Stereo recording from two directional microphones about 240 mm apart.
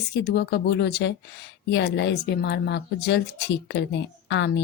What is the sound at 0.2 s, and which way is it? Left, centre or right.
Speech, left.